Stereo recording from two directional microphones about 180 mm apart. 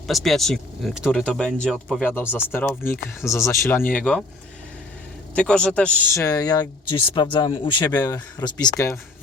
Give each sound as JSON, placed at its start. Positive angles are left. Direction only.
{"t": 0.1, "sound": "speech", "side_deg": 0}
{"t": 5.3, "sound": "speech", "side_deg": 5}
{"t": 6.1, "sound": "speech", "side_deg": 20}